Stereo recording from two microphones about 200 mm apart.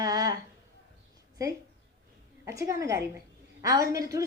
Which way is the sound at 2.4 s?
15° right (ahead or behind).